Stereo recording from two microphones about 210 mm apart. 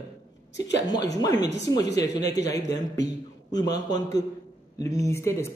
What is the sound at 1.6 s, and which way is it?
A man's voice, 15° left (ahead or behind).